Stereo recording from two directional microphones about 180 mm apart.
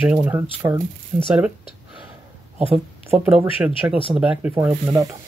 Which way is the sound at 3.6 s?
10° right (ahead or behind).